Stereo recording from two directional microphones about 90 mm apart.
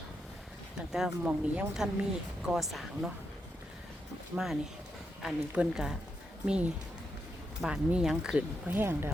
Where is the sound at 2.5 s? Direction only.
Centre (ahead or behind).